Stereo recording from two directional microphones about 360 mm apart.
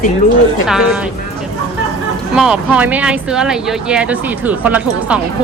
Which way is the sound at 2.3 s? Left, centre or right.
Centre.